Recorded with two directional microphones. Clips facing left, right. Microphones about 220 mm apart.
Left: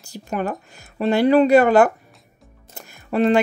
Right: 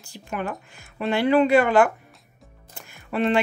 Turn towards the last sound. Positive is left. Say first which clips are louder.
# left 5 dB
turn(degrees=40)  # may be behind; listen again after turning